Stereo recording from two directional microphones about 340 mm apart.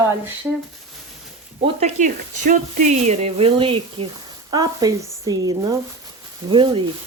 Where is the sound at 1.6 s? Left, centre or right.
Centre.